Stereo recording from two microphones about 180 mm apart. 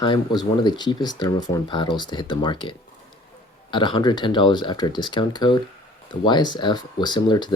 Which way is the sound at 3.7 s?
25° left (ahead or behind).